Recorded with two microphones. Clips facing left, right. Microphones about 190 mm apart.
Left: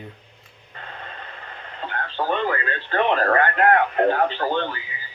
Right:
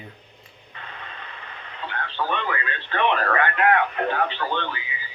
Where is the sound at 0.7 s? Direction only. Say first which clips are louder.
Left 2 dB; 45° left (ahead or behind).